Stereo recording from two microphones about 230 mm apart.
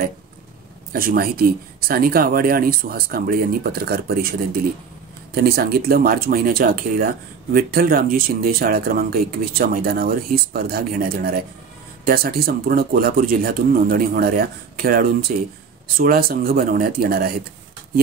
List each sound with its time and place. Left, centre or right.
0.9 s speech: right